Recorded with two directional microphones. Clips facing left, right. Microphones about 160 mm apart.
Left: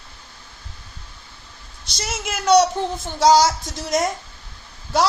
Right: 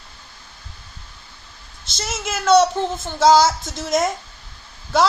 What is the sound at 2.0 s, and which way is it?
A child's voice, 15° left (ahead or behind).